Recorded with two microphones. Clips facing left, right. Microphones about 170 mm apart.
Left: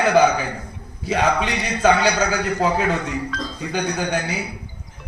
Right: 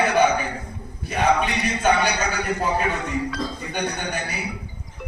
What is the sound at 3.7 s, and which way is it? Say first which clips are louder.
Speech: left 8 dB; 90° left.